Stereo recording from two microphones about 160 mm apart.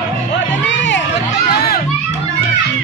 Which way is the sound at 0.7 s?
90° left.